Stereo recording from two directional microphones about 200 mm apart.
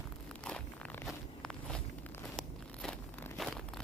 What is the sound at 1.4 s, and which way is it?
Walk, 5° left (ahead or behind).